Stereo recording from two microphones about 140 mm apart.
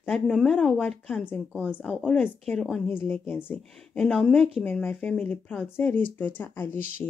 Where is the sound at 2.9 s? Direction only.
15° left (ahead or behind).